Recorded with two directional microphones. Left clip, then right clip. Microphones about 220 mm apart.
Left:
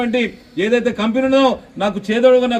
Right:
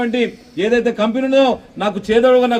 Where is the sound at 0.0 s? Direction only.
45° left (ahead or behind).